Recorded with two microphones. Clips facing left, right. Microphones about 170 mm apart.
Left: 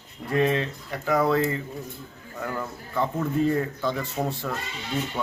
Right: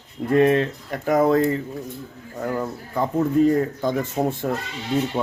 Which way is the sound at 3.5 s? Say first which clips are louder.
Right 5 dB; 40° right (ahead or behind).